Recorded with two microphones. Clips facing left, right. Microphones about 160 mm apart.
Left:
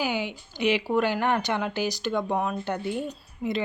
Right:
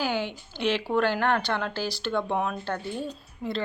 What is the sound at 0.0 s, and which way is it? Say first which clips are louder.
Speech: even; 10° left (ahead or behind).